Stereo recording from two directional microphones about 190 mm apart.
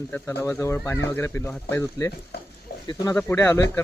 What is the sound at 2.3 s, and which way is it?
Speech, 55° left (ahead or behind).